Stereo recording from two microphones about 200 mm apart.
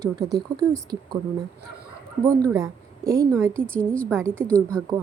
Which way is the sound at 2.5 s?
15° right (ahead or behind).